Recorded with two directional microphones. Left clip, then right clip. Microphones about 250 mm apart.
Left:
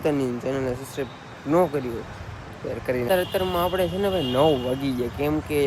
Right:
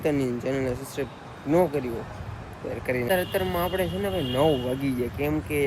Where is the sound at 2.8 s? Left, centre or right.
Centre.